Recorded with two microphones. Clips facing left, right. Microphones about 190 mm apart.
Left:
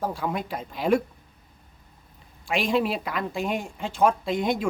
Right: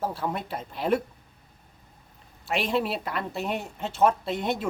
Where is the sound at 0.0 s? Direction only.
5° right (ahead or behind).